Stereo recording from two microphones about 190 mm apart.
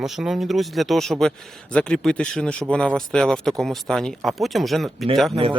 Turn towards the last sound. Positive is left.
turn(degrees=0)  # may be behind; listen again after turning